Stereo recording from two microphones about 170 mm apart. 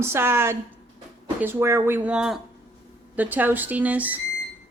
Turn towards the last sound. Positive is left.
turn(degrees=-10)  # may be behind; listen again after turning